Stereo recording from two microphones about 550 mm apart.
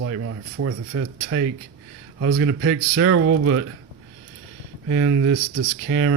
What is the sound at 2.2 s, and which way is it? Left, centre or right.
Speech, right.